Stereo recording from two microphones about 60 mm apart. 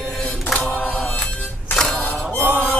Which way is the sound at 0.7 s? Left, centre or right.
Left.